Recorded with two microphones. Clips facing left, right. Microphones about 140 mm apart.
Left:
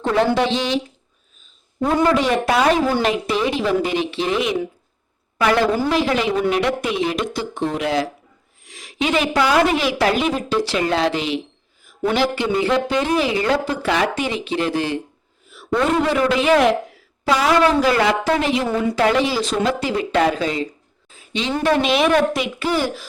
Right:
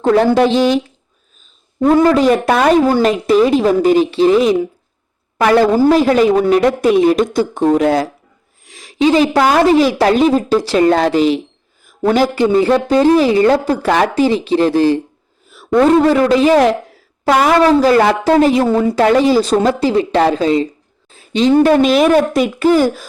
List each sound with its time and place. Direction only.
0.0 s a woman's voice: 40° right (ahead or behind)
1.8 s a woman's voice: 40° right (ahead or behind)
8.6 s a sound: 35° right (ahead or behind)
9.6 s a woman's voice: 35° right (ahead or behind)
17.2 s speech: 55° right (ahead or behind)
17.6 s a woman's voice: 35° right (ahead or behind)